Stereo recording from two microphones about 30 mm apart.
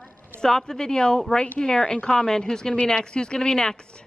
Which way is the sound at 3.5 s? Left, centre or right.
Centre.